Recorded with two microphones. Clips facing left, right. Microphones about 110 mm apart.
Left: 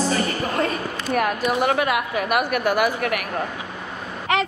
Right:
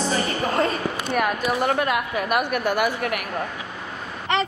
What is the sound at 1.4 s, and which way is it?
A woman's voice, centre (ahead or behind).